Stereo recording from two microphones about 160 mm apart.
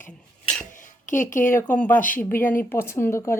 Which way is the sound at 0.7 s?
55° left (ahead or behind).